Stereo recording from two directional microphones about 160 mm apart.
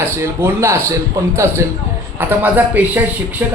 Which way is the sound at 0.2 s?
15° right (ahead or behind).